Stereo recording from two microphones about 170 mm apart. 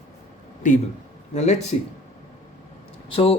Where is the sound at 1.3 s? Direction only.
40° left (ahead or behind).